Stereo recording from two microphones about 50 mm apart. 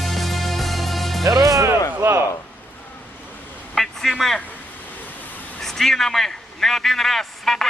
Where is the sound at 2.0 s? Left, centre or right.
Right.